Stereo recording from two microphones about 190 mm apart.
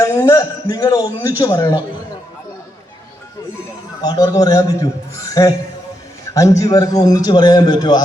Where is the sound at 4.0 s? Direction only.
20° left (ahead or behind).